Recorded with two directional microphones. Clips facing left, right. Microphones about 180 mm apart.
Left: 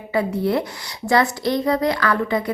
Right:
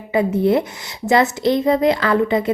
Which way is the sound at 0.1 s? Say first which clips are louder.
Right 4 dB; 20° right (ahead or behind).